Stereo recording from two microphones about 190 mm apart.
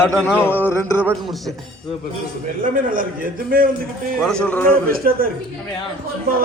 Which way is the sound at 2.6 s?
45° right (ahead or behind).